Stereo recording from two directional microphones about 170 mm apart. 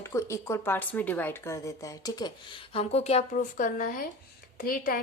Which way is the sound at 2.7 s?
35° left (ahead or behind).